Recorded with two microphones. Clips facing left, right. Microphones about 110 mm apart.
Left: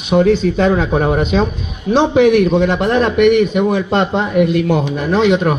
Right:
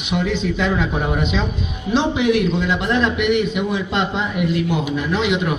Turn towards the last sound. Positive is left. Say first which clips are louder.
# left 7 dB
turn(degrees=45)  # may be behind; listen again after turning